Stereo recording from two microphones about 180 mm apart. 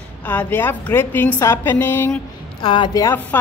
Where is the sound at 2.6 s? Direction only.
25° left (ahead or behind).